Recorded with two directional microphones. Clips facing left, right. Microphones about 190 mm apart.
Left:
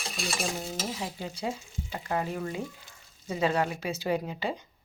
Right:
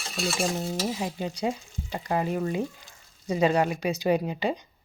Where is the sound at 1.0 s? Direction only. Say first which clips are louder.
Right 5 dB; 20° right (ahead or behind).